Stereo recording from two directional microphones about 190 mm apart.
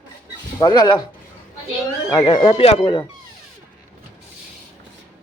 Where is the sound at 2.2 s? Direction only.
30° left (ahead or behind).